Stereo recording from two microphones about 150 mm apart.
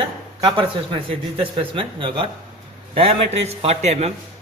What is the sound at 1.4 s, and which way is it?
A man's voice, 35° right (ahead or behind).